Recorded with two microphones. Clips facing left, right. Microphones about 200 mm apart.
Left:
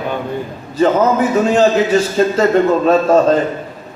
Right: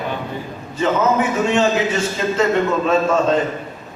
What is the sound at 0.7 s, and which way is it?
A man's voice, 35° left (ahead or behind).